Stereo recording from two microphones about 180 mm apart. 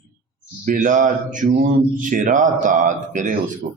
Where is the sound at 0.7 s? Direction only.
45° right (ahead or behind).